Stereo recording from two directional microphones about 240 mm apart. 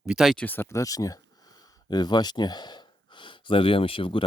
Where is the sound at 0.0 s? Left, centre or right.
Centre.